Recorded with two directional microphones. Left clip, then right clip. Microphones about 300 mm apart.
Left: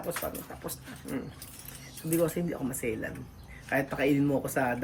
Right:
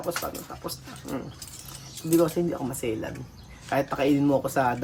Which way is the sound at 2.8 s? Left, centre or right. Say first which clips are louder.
Right 3 dB; centre.